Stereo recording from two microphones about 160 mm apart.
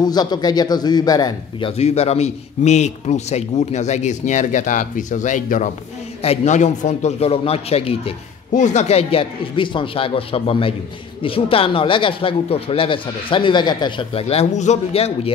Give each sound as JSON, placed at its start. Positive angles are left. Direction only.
{"t": 0.0, "sound": "speech", "side_deg": 25}
{"t": 1.8, "sound": "a man's voice", "side_deg": 40}
{"t": 8.5, "sound": "speech", "side_deg": 45}